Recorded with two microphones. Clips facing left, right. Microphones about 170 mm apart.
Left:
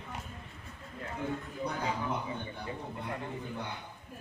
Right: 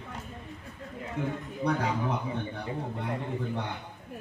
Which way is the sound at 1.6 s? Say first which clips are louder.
Right 7 dB; 75° right (ahead or behind).